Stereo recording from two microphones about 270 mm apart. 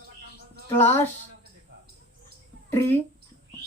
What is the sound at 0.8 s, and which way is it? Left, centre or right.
Speech, centre.